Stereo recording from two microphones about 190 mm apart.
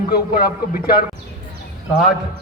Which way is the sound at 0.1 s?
55° left (ahead or behind).